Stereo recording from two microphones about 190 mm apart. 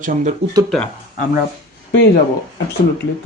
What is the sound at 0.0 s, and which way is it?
Speech, 40° right (ahead or behind).